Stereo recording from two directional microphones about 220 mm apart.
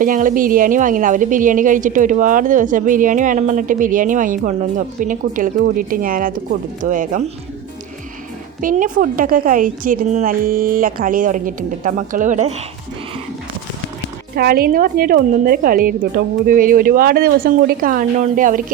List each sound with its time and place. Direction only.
0.0 s a woman's voice: 35° right (ahead or behind)
8.6 s a woman's voice: 40° right (ahead or behind)
14.3 s a woman's voice: 40° right (ahead or behind)